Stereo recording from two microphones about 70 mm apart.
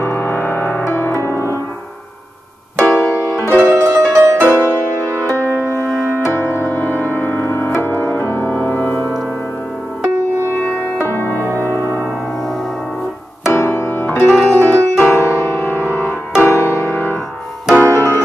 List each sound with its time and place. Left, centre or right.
0.0 s music: left
0.8 s music: left
2.8 s music: left
3.7 s music: right
4.5 s music: left
6.2 s music: left
11.0 s music: left
13.5 s piano: left
15.9 s music: left